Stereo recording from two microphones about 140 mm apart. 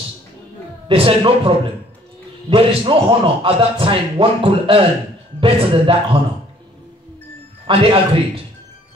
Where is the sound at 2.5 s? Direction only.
40° right (ahead or behind).